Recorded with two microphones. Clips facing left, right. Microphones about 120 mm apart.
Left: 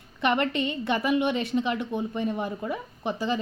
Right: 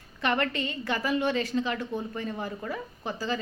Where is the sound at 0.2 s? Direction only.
20° left (ahead or behind).